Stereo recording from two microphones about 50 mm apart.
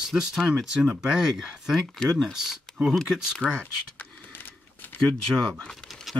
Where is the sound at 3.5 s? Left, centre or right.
Left.